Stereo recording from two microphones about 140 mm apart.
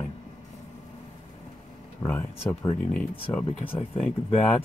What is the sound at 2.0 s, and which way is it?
Speech, 35° left (ahead or behind).